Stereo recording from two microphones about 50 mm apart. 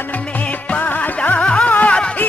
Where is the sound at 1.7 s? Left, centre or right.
Left.